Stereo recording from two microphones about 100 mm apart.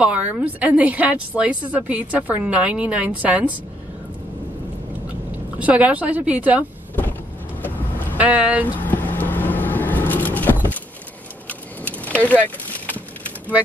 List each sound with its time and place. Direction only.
0.0 s a woman's voice: 15° right (ahead or behind)
5.6 s a woman's voice: 15° right (ahead or behind)
8.2 s a woman's voice: 15° right (ahead or behind)
8.7 s vehicle: 20° left (ahead or behind)